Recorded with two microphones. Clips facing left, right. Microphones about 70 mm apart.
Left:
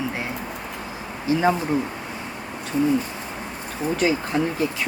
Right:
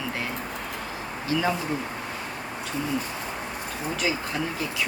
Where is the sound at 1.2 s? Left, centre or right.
Left.